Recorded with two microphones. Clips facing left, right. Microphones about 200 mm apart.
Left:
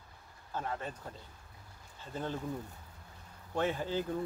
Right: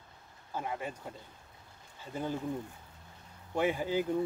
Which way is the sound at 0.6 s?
10° right (ahead or behind).